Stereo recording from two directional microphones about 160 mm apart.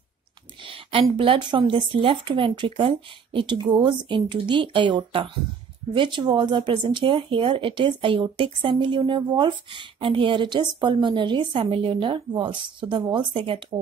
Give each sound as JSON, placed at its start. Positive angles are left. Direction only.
{"t": 1.1, "sound": "speech", "side_deg": -35}